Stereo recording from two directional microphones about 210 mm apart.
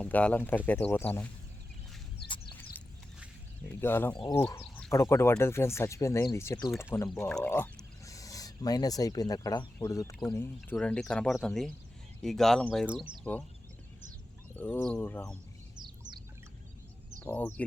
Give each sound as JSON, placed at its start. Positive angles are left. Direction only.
{"t": 0.0, "sound": "speech", "side_deg": 5}
{"t": 2.2, "sound": "a sound", "side_deg": 25}
{"t": 3.8, "sound": "speech", "side_deg": 10}
{"t": 4.1, "sound": "speech", "side_deg": 20}
{"t": 4.6, "sound": "speech", "side_deg": 10}
{"t": 7.1, "sound": "speech", "side_deg": 5}
{"t": 14.6, "sound": "speech", "side_deg": 10}
{"t": 15.7, "sound": "bird", "side_deg": -20}
{"t": 17.2, "sound": "speech", "side_deg": 10}